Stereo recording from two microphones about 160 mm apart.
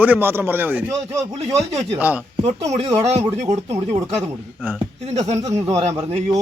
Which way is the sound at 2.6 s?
20° right (ahead or behind).